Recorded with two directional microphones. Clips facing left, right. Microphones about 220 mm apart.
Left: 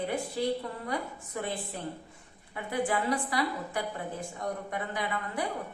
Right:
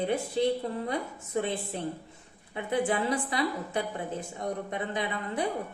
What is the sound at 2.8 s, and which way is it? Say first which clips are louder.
A woman's voice: left 2 dB; 20° right (ahead or behind).